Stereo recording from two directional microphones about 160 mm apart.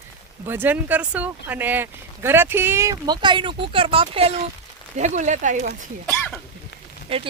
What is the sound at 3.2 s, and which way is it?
Speech, 30° right (ahead or behind).